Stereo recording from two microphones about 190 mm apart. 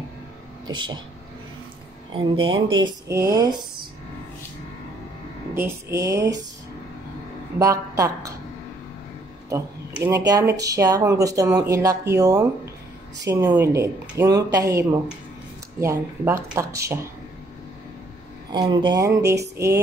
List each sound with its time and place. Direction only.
0.7 s a woman's voice: 25° right (ahead or behind)
2.1 s a woman's voice: 25° right (ahead or behind)
5.5 s speech: 15° right (ahead or behind)
7.5 s speech: 15° right (ahead or behind)
9.9 s a woman's voice: 15° right (ahead or behind)
18.5 s speech: 25° right (ahead or behind)